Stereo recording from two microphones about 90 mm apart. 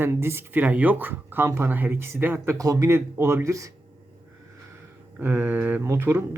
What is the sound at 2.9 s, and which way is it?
Speech, 30° right (ahead or behind).